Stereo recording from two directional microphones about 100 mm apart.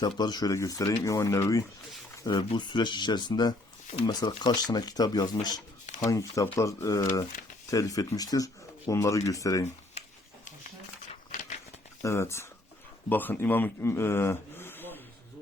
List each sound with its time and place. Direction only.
0.0 s speech: 45° left (ahead or behind)
2.3 s speech: 45° left (ahead or behind)
12.0 s speech: 25° left (ahead or behind)